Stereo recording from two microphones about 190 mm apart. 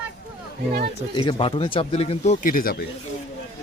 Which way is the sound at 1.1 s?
25° left (ahead or behind).